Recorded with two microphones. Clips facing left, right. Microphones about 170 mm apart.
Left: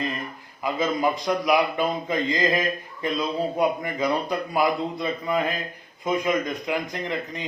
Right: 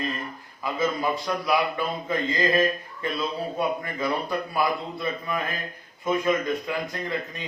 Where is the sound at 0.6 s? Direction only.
20° left (ahead or behind).